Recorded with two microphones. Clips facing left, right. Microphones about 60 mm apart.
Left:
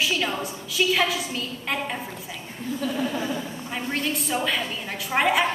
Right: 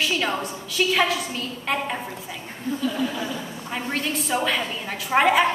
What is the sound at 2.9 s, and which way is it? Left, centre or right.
Speech, left.